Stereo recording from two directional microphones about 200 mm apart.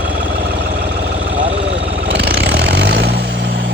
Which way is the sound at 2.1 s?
60° right (ahead or behind).